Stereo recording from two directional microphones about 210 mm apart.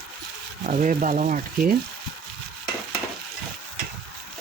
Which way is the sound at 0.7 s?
40° right (ahead or behind).